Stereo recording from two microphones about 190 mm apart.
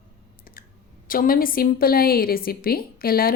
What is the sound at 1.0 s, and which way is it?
A woman's voice, 50° left (ahead or behind).